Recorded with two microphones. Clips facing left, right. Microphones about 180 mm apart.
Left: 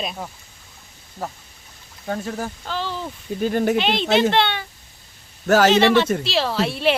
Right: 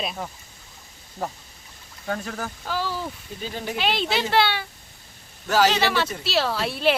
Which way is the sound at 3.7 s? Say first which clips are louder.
Left 6 dB; 5° right (ahead or behind).